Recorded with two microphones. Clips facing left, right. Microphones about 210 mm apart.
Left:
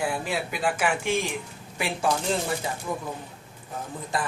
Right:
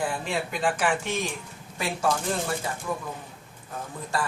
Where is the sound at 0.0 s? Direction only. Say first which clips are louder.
Left 1 dB; 5° left (ahead or behind).